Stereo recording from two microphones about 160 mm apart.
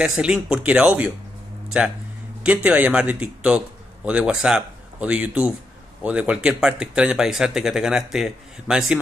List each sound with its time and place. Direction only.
0.0 s speech: 5° right (ahead or behind)
2.4 s a man's voice: 10° right (ahead or behind)